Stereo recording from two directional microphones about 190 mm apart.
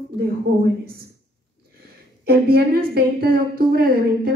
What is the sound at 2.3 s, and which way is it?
A woman's voice, 55° right (ahead or behind).